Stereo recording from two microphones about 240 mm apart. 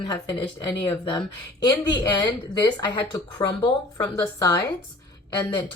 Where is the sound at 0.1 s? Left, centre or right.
Centre.